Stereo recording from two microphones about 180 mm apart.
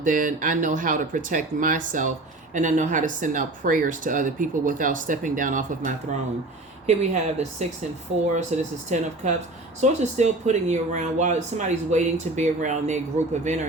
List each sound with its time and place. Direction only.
0.0 s speech: 45° right (ahead or behind)